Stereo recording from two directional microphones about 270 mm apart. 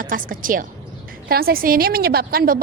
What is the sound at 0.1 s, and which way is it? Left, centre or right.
A woman's voice, right.